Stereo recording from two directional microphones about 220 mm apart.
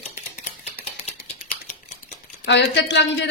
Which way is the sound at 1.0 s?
30° left (ahead or behind).